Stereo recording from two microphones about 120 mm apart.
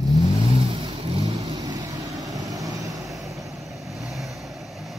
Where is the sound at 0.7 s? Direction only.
45° right (ahead or behind).